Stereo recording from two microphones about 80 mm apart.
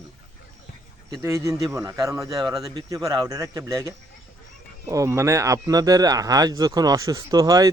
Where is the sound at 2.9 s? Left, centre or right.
Right.